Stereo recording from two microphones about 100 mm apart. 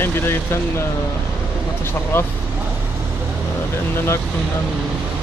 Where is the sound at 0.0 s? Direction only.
25° left (ahead or behind).